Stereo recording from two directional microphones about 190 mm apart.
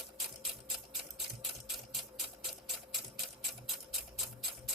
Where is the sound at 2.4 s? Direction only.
Centre (ahead or behind).